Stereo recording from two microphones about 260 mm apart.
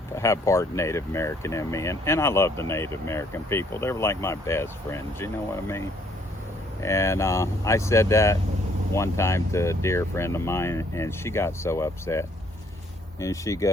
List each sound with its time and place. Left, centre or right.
0.2 s speech: centre
6.8 s speech: centre